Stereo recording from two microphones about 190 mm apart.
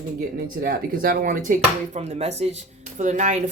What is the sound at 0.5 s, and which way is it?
A woman's voice, 50° right (ahead or behind).